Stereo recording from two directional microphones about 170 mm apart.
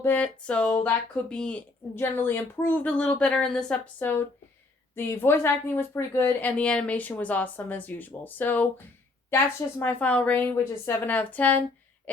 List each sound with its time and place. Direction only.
0.0 s speech: 10° left (ahead or behind)
12.1 s cough: 10° left (ahead or behind)